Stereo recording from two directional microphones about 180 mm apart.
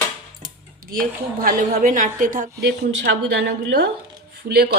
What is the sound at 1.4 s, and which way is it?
A woman's voice, 55° right (ahead or behind).